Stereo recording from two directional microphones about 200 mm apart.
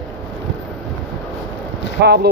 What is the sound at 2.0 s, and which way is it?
Speech, 55° right (ahead or behind).